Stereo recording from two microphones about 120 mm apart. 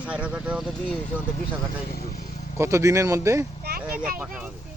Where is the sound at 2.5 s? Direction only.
25° right (ahead or behind).